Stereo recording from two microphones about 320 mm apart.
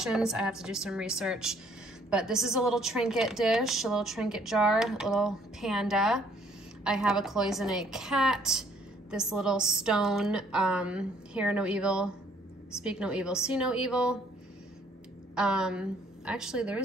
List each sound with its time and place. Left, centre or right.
0.0 s a woman's voice: centre
15.3 s a woman's voice: centre